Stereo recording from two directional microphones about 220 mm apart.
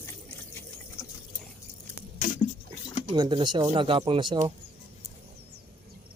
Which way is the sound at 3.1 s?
20° right (ahead or behind).